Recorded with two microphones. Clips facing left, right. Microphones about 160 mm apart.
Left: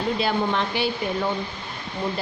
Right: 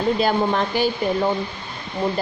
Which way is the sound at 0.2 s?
45° right (ahead or behind).